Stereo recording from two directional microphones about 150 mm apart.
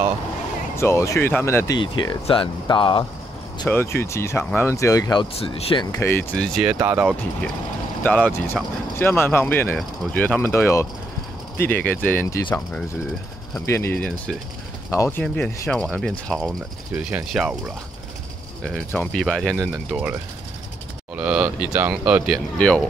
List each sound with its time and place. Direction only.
0.7 s speech: 20° left (ahead or behind)
1.8 s speech: 30° left (ahead or behind)
3.6 s speech: 15° left (ahead or behind)
5.4 s speech: 35° left (ahead or behind)
5.9 s speech: 15° left (ahead or behind)
8.0 s speech: 10° left (ahead or behind)
13.7 s speech: 15° left (ahead or behind)
14.9 s speech: 15° left (ahead or behind)
16.9 s speech: 10° right (ahead or behind)
18.6 s speech: 10° left (ahead or behind)
21.2 s speech: 5° right (ahead or behind)
22.3 s speech: 5° left (ahead or behind)